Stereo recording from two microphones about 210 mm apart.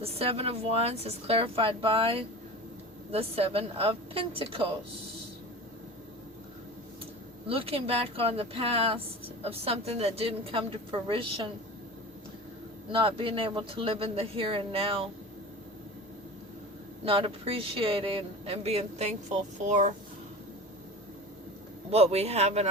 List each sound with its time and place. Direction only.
0.0 s speech: 30° right (ahead or behind)
7.4 s speech: 25° right (ahead or behind)
12.9 s speech: 25° right (ahead or behind)
17.1 s speech: 25° right (ahead or behind)
21.8 s speech: 30° right (ahead or behind)